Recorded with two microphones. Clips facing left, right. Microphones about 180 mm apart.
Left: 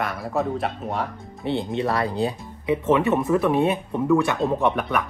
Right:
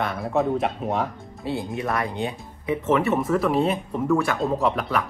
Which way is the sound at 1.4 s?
25° left (ahead or behind).